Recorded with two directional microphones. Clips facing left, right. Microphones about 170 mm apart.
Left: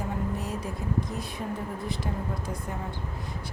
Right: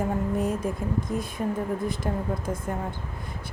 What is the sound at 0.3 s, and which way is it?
Vehicle, 50° right (ahead or behind).